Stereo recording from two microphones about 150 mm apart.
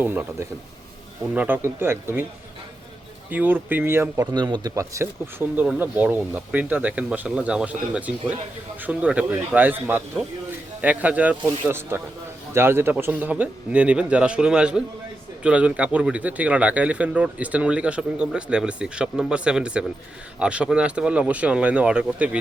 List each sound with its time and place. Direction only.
0.0 s speech: 15° right (ahead or behind)
3.2 s speech: 10° right (ahead or behind)
4.4 s speech: 30° right (ahead or behind); by 22.4 s 5° right (ahead or behind)